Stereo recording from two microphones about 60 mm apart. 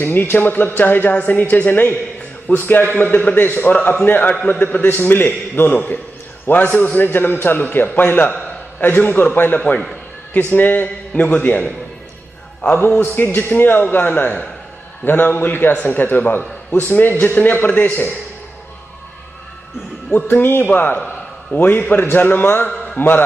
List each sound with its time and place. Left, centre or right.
0.0 s a man's voice: left
20.1 s a man's voice: left